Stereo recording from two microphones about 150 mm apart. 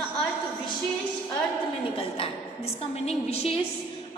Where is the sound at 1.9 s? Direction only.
40° left (ahead or behind).